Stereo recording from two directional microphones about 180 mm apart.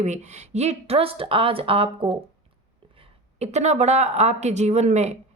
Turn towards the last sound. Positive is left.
turn(degrees=-40)  # may be behind; listen again after turning